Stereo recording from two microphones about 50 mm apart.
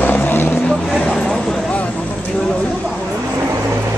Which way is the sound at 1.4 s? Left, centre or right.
Centre.